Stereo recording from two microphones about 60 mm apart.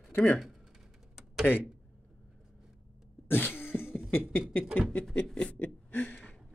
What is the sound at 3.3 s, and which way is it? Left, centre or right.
Cough, left.